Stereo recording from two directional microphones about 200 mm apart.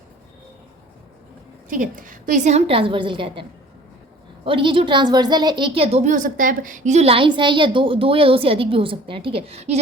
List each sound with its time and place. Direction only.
1.7 s a woman's voice: 40° right (ahead or behind); by 3.4 s 25° right (ahead or behind)
4.4 s a woman's voice: 25° right (ahead or behind)